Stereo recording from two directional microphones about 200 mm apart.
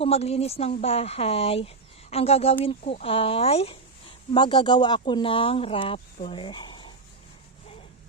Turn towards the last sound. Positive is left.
turn(degrees=20)  # may be behind; listen again after turning